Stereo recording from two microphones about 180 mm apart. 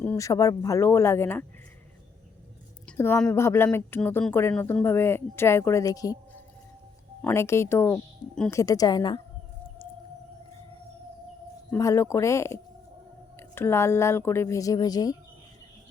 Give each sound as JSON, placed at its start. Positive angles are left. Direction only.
{"t": 0.0, "sound": "speech", "side_deg": 15}
{"t": 3.0, "sound": "speech", "side_deg": 10}
{"t": 11.7, "sound": "speech", "side_deg": 15}
{"t": 13.6, "sound": "speech", "side_deg": 15}